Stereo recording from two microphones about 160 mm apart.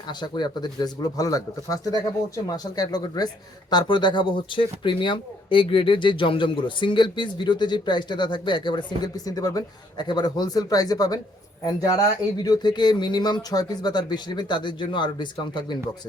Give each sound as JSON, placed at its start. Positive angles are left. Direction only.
{"t": 0.1, "sound": "speech", "side_deg": 25}